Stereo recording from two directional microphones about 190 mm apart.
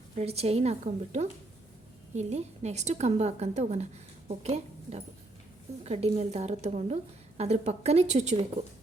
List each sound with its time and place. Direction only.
0.2 s a woman's voice: 35° right (ahead or behind)